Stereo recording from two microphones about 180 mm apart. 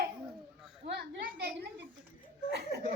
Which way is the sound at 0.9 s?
65° right (ahead or behind).